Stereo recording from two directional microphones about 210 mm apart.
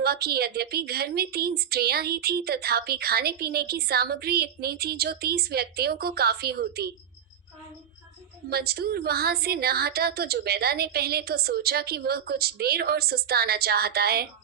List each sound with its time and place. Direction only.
0.0 s a woman's voice: 45° right (ahead or behind)
8.4 s a woman's voice: 50° right (ahead or behind)